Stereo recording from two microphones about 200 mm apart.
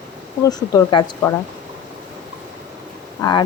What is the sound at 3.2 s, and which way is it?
Speech, 20° left (ahead or behind).